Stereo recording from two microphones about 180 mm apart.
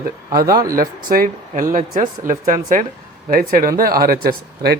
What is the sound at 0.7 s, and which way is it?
Speech, 50° right (ahead or behind).